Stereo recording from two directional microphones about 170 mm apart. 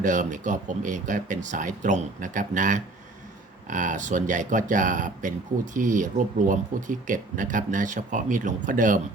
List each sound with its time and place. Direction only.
0.0 s speech: 50° right (ahead or behind)